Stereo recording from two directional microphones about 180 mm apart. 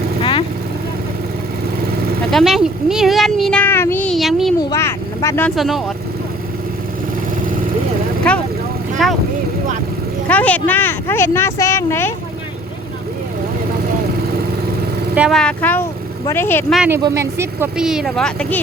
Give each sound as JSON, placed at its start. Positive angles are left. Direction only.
{"t": 0.2, "sound": "vehicle", "side_deg": 30}
{"t": 2.3, "sound": "speech", "side_deg": 0}
{"t": 4.7, "sound": "speech", "side_deg": 15}
{"t": 5.5, "sound": "speech", "side_deg": 0}
{"t": 8.3, "sound": "speech", "side_deg": 5}
{"t": 10.2, "sound": "speech", "side_deg": 10}
{"t": 15.1, "sound": "speech", "side_deg": -5}
{"t": 15.4, "sound": "speech", "side_deg": 5}
{"t": 16.7, "sound": "speech", "side_deg": -5}
{"t": 17.7, "sound": "speech", "side_deg": -5}